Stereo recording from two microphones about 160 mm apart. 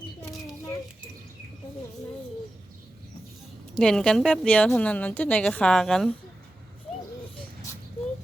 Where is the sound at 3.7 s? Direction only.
5° left (ahead or behind).